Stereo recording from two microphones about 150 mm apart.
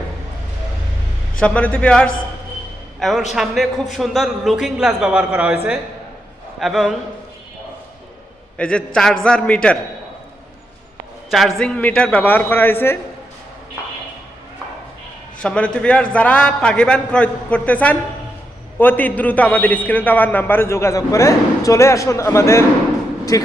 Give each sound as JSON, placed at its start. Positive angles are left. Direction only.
{"t": 1.4, "sound": "a man's voice", "side_deg": 10}
{"t": 6.6, "sound": "a man's voice", "side_deg": 0}
{"t": 8.5, "sound": "a man's voice", "side_deg": 5}
{"t": 11.3, "sound": "a man's voice", "side_deg": 0}
{"t": 15.4, "sound": "a man's voice", "side_deg": 5}